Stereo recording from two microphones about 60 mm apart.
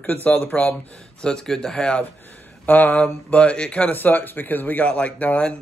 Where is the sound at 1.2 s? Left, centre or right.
Centre.